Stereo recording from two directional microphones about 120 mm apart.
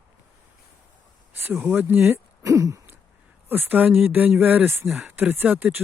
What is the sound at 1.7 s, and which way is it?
Speech, 20° right (ahead or behind).